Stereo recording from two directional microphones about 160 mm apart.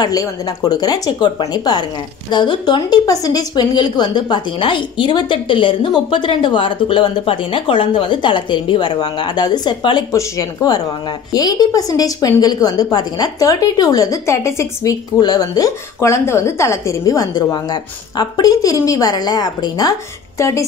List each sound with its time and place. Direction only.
0.0 s a woman's voice: 20° left (ahead or behind)